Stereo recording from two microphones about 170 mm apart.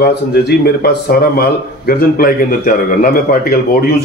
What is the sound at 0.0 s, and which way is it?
Speech, 70° left (ahead or behind).